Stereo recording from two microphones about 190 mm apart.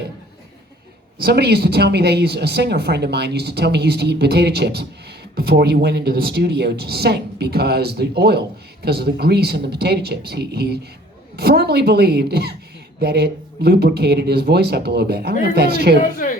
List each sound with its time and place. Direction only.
1.2 s speech: 60° right (ahead or behind)